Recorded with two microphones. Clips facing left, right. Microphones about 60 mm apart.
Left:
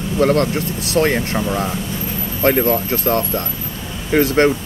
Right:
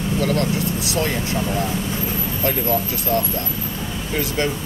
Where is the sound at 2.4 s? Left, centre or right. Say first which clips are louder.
Left 7 dB; left.